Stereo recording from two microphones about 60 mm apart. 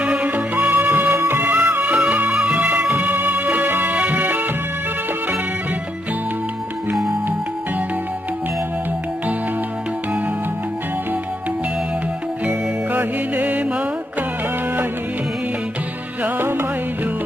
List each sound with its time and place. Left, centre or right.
0.0 s music: right
1.5 s music: right
2.9 s music: right
12.4 s music: right
16.3 s music: right